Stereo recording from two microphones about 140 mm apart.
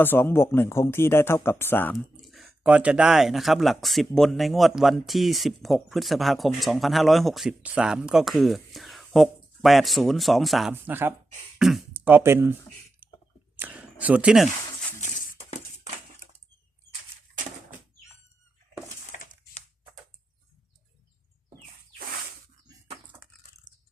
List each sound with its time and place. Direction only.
0.0 s speech: 15° left (ahead or behind)
2.2 s speech: centre (ahead or behind)
10.8 s speech: 15° right (ahead or behind)
13.6 s speech: 10° right (ahead or behind)
19.1 s crushing: 75° left (ahead or behind)